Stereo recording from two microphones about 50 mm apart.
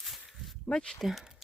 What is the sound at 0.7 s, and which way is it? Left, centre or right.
Speech, centre.